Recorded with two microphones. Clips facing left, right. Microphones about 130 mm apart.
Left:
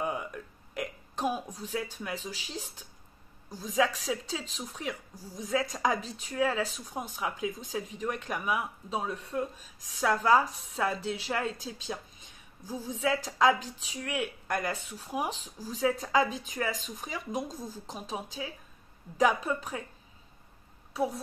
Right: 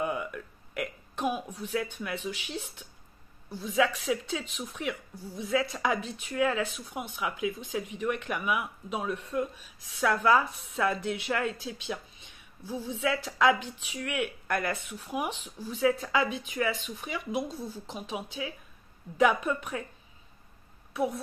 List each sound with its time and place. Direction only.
0.0 s burping: 30° left (ahead or behind)
3.4 s speech: 40° left (ahead or behind)
20.9 s speech: 35° left (ahead or behind)